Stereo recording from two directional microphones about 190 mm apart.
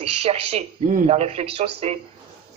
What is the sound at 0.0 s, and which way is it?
Speech, 30° right (ahead or behind).